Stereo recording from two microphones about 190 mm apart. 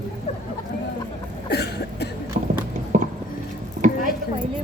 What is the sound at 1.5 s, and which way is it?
Cough, 60° left (ahead or behind).